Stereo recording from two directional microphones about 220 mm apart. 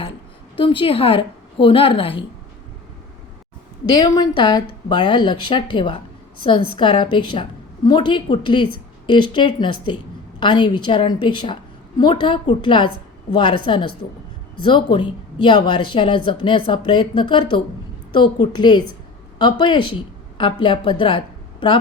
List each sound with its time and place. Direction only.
0.0 s a woman's voice: 25° left (ahead or behind)
3.9 s a woman's voice: 15° left (ahead or behind)